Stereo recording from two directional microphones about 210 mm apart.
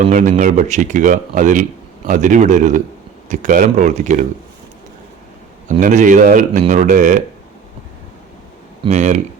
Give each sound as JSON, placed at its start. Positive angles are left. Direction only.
{"t": 0.0, "sound": "speech", "side_deg": -35}
{"t": 5.8, "sound": "speech", "side_deg": -35}
{"t": 8.8, "sound": "speech", "side_deg": -35}